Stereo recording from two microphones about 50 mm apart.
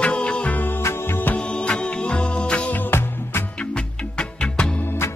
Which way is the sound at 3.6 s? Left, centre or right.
Centre.